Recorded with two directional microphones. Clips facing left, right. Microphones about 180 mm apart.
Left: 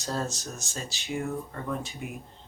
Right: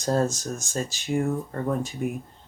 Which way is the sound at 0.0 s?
50° right (ahead or behind).